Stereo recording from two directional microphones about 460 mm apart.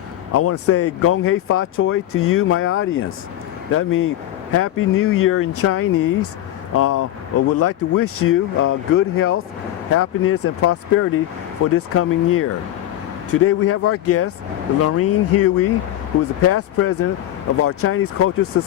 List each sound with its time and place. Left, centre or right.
0.3 s speech: left